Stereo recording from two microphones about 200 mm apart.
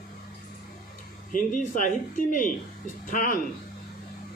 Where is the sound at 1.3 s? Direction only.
45° left (ahead or behind).